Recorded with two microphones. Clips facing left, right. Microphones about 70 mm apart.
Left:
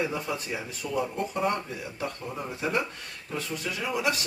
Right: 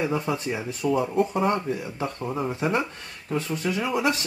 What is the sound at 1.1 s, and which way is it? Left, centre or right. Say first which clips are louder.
Speech: right 6 dB; centre.